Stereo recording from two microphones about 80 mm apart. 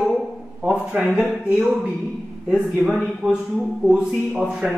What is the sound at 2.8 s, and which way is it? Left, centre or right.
Speech, centre.